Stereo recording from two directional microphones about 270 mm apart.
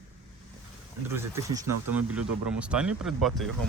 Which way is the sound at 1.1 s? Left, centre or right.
Centre.